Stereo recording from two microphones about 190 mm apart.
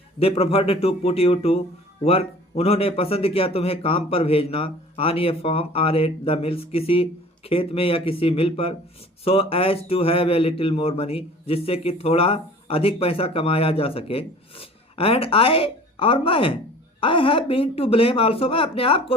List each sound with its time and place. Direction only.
0.2 s speech: 30° left (ahead or behind)